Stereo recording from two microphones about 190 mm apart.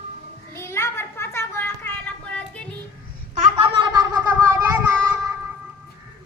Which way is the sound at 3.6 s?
25° right (ahead or behind).